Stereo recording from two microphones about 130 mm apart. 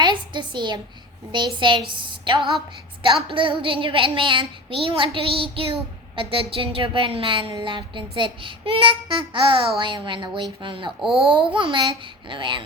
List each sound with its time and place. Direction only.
0.0 s a woman's voice: 35° right (ahead or behind)
1.3 s child singing: 35° right (ahead or behind)
3.2 s a woman's voice: 40° right (ahead or behind)
7.6 s child singing: 40° right (ahead or behind)